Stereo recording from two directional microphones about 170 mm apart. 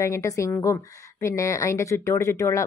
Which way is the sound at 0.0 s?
15° left (ahead or behind).